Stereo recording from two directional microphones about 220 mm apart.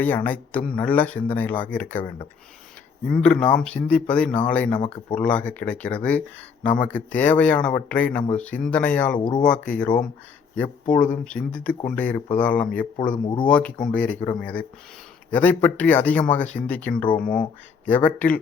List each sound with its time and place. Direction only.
0.0 s speech: 10° left (ahead or behind)
3.1 s speech: 5° left (ahead or behind)
13.2 s speech: 20° left (ahead or behind)
13.5 s speech: 5° left (ahead or behind)
17.2 s speech: 40° left (ahead or behind)
18.0 s speech: 5° left (ahead or behind)